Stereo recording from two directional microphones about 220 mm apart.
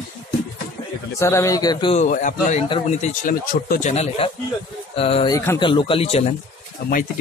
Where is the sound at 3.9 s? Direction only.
30° left (ahead or behind).